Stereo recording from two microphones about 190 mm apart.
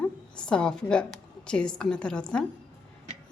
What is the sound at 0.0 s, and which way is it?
A woman's voice, 5° left (ahead or behind).